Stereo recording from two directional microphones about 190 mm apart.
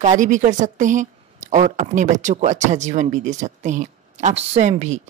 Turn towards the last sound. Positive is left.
turn(degrees=-35)  # may be behind; listen again after turning